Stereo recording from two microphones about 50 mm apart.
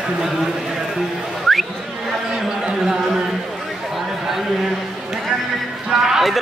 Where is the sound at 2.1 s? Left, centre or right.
Centre.